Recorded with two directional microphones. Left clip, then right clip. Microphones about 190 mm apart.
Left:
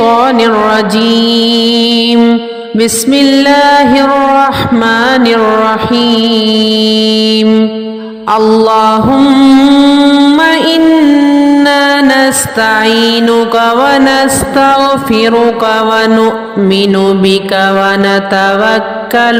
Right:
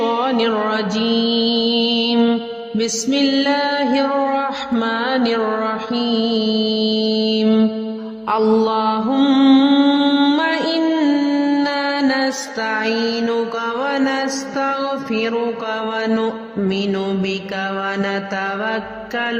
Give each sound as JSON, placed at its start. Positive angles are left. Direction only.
{"t": 0.0, "sound": "mantra", "side_deg": 40}
{"t": 2.1, "sound": "mantra", "side_deg": 25}
{"t": 2.7, "sound": "music", "side_deg": 40}
{"t": 8.5, "sound": "music", "side_deg": 40}
{"t": 9.1, "sound": "music", "side_deg": 30}
{"t": 10.9, "sound": "music", "side_deg": 30}
{"t": 11.6, "sound": "mantra", "side_deg": 40}